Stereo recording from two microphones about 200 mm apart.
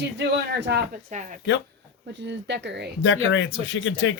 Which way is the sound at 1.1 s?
40° right (ahead or behind).